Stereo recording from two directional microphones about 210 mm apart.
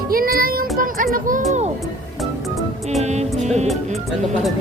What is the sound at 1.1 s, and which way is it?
Speech, 40° right (ahead or behind).